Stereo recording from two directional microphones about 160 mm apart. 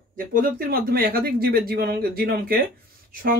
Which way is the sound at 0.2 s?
60° right (ahead or behind).